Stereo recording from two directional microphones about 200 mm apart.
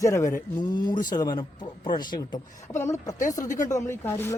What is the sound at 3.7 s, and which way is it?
Speech, 15° left (ahead or behind).